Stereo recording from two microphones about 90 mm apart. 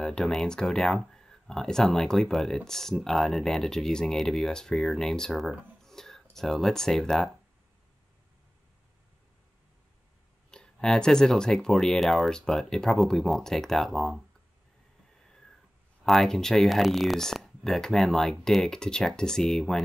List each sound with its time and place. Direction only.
0.0 s speech: 5° left (ahead or behind)
5.8 s a sound: 5° left (ahead or behind)
6.3 s speech: 5° left (ahead or behind)
10.5 s speech: 5° left (ahead or behind)
15.1 s cat: 5° left (ahead or behind)
16.0 s speech: 5° left (ahead or behind)